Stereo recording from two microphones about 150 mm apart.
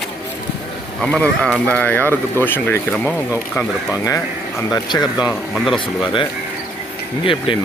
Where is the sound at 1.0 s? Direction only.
5° left (ahead or behind).